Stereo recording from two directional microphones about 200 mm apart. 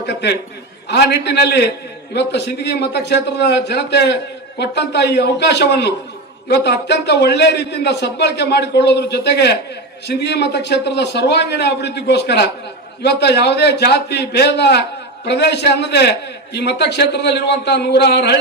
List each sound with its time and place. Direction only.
0.0 s a man's voice: 55° left (ahead or behind)